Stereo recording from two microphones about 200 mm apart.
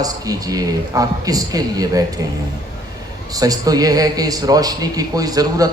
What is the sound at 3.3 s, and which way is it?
Speech, 20° right (ahead or behind).